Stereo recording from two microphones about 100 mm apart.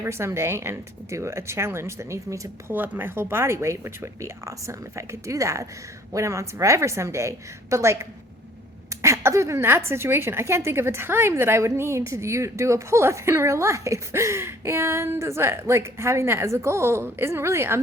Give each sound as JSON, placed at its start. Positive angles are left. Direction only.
{"t": 0.0, "sound": "a woman's voice", "side_deg": -25}
{"t": 2.7, "sound": "a woman's voice", "side_deg": -20}